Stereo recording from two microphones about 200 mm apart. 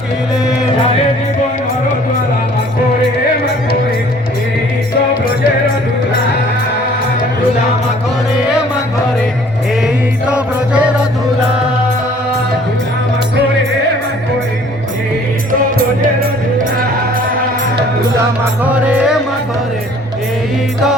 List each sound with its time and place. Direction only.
9.8 s music: 5° right (ahead or behind)
18.6 s music: 5° right (ahead or behind)